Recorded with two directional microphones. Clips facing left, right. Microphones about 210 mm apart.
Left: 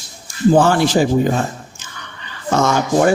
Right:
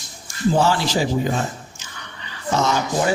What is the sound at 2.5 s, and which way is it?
Speech, 50° left (ahead or behind).